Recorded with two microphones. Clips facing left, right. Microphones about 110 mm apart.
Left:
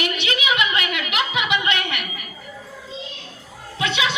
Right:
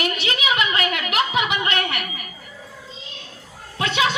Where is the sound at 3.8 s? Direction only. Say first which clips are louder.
Right 2 dB; 45° right (ahead or behind).